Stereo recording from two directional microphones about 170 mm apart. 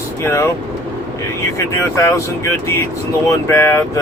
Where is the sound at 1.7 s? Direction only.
15° left (ahead or behind).